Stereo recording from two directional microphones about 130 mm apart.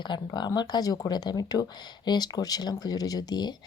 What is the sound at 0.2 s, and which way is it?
Speech, 30° left (ahead or behind).